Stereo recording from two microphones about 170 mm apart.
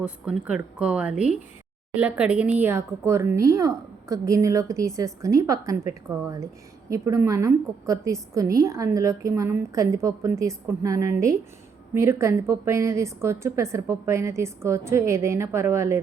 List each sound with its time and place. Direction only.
0.0 s a woman's voice: 5° right (ahead or behind)